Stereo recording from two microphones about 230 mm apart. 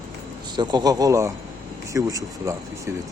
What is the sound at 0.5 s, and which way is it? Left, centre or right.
Speech, centre.